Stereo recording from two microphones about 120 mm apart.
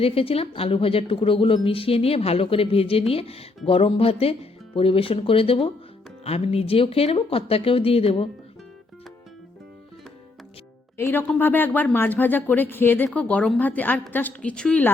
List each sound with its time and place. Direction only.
0.0 s a woman's voice: 50° left (ahead or behind)
10.9 s a woman's voice: 15° left (ahead or behind)